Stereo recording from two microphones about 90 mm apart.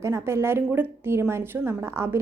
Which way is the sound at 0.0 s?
30° right (ahead or behind).